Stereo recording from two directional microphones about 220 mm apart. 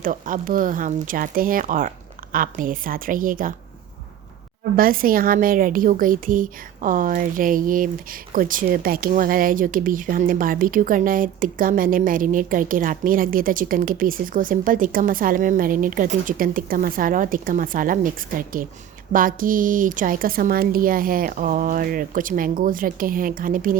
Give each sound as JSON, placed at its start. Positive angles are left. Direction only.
{"t": 0.0, "sound": "speech", "side_deg": -40}
{"t": 4.8, "sound": "speech", "side_deg": -40}